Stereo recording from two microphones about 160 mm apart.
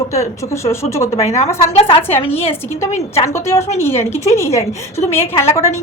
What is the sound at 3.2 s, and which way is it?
A woman's voice, 20° left (ahead or behind).